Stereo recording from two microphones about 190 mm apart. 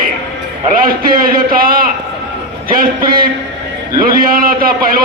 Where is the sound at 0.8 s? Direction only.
50° right (ahead or behind).